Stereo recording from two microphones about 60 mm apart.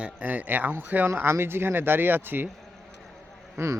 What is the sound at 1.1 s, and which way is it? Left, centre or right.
Speech, right.